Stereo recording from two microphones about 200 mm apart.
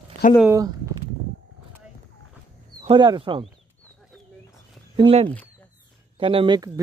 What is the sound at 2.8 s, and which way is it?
Speech, 25° right (ahead or behind).